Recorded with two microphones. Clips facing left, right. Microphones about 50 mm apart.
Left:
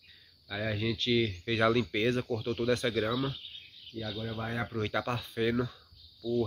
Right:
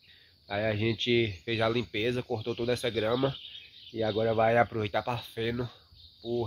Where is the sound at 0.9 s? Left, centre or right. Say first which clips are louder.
Even; right.